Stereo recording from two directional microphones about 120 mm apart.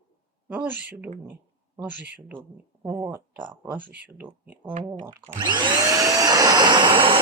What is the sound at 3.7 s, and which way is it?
Speech, 15° right (ahead or behind).